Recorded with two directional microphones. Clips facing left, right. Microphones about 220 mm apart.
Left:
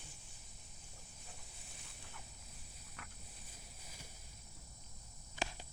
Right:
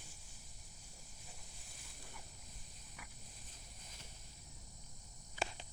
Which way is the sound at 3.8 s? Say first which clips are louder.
Left 3 dB; 10° left (ahead or behind).